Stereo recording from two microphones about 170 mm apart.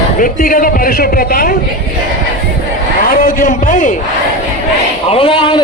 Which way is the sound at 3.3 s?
55° left (ahead or behind).